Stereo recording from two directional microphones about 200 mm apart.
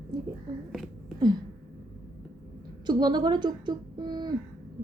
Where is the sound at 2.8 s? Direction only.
20° right (ahead or behind).